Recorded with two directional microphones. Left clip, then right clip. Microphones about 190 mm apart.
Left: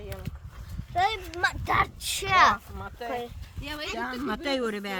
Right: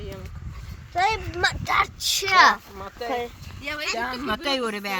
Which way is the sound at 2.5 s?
15° left (ahead or behind).